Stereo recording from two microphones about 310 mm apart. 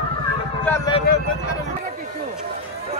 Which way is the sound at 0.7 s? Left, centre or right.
Centre.